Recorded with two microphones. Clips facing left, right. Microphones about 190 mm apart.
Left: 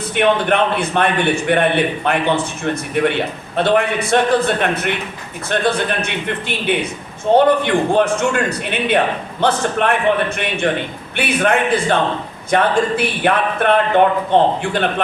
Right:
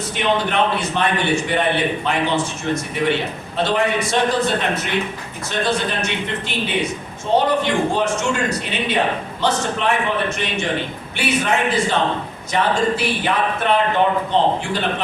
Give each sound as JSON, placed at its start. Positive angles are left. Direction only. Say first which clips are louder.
{"t": 0.2, "sound": "speech", "louder": "left 4 dB", "side_deg": 55}